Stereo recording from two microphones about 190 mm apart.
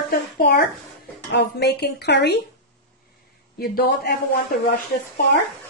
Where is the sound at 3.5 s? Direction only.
55° left (ahead or behind).